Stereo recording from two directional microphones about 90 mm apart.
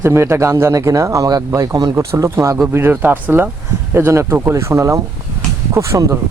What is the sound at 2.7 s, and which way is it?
Speech, 25° right (ahead or behind).